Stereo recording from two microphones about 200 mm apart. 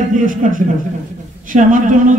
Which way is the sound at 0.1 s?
40° right (ahead or behind).